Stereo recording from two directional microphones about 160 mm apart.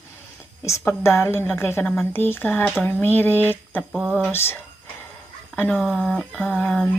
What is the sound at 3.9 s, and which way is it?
Speech, centre (ahead or behind).